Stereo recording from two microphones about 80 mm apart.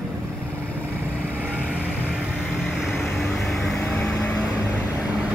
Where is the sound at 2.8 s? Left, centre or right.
Centre.